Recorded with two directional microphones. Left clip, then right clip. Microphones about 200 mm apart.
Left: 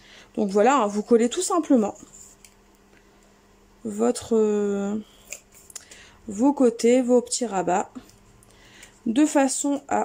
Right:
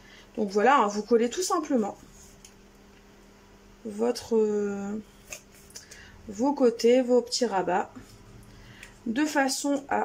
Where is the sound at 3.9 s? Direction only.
25° left (ahead or behind).